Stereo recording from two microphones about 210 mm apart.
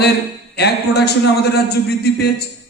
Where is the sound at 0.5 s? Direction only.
50° left (ahead or behind).